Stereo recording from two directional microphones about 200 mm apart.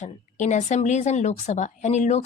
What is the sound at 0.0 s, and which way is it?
Speech, 40° left (ahead or behind).